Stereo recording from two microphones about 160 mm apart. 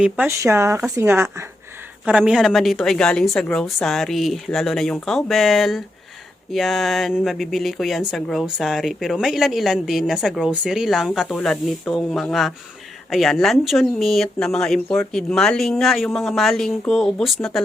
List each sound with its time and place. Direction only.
0.0 s a woman's voice: 10° right (ahead or behind)
2.0 s speech: 5° right (ahead or behind)